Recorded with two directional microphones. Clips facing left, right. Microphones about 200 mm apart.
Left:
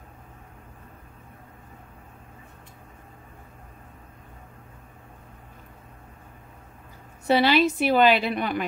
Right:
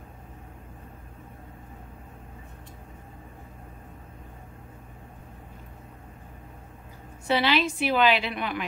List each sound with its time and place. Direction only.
7.2 s a woman's voice: 40° left (ahead or behind)